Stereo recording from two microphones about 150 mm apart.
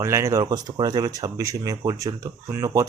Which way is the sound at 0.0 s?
20° right (ahead or behind).